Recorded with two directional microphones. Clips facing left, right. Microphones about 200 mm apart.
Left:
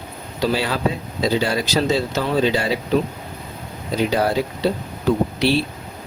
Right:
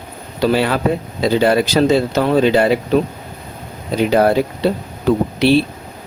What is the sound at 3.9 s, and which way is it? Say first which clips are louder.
Speech: right 6 dB; 55° right (ahead or behind).